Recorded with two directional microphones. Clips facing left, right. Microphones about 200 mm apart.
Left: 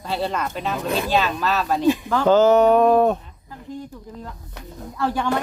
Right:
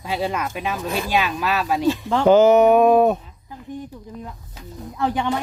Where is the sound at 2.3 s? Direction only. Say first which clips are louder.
Right 1 dB; 10° right (ahead or behind).